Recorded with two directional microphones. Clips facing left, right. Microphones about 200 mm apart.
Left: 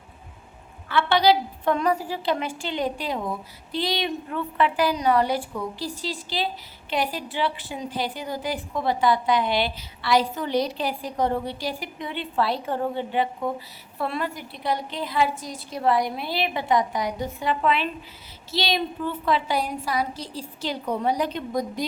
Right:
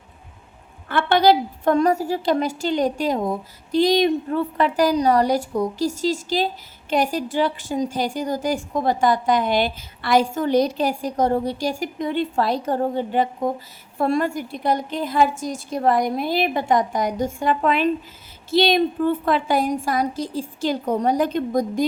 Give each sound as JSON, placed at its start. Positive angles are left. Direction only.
{"t": 0.9, "sound": "a woman's voice", "side_deg": -50}